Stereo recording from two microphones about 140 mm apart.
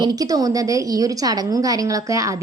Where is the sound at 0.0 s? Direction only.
25° right (ahead or behind).